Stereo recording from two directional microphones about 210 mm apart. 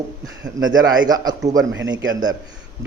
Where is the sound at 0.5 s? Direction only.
65° right (ahead or behind).